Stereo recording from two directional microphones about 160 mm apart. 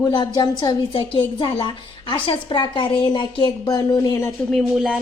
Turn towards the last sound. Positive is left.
turn(degrees=-5)  # may be behind; listen again after turning